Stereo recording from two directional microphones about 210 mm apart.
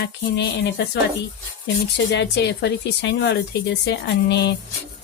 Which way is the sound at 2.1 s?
55° left (ahead or behind).